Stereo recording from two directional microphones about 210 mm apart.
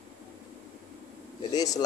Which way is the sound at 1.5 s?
15° left (ahead or behind).